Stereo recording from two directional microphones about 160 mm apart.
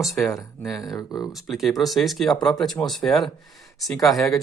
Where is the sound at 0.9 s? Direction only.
25° left (ahead or behind).